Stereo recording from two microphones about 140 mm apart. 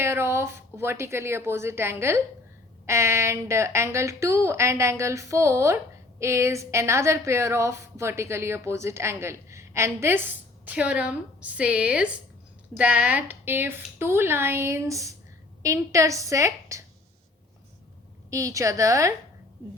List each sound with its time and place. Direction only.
0.0 s a woman's voice: 20° right (ahead or behind)
18.3 s a woman's voice: 20° right (ahead or behind)